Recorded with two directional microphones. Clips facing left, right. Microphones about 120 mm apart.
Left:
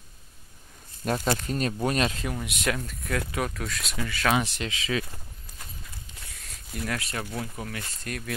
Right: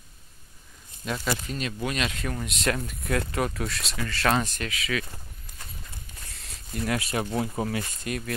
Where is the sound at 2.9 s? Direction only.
5° right (ahead or behind).